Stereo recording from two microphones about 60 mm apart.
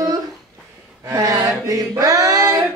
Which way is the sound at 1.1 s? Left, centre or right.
Right.